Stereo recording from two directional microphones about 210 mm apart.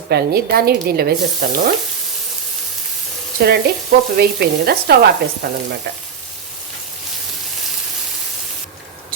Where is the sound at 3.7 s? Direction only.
50° right (ahead or behind).